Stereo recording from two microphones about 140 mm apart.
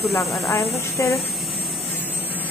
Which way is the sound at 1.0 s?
20° left (ahead or behind).